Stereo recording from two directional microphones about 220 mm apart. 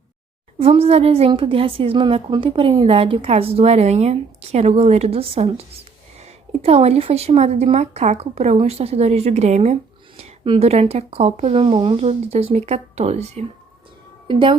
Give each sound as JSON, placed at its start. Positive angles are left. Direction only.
{"t": 0.6, "sound": "a woman's voice", "side_deg": -25}